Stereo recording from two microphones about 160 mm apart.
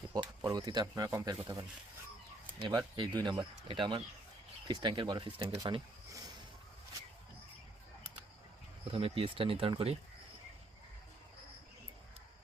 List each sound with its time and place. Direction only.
0.1 s speech: 25° right (ahead or behind)
5.5 s a sound: 25° right (ahead or behind)
8.9 s speech: 35° right (ahead or behind)